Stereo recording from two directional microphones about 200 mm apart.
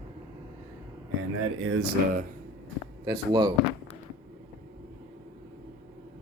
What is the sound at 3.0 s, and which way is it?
Speech, 20° right (ahead or behind).